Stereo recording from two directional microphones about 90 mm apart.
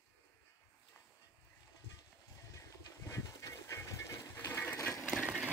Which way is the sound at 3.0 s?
35° left (ahead or behind).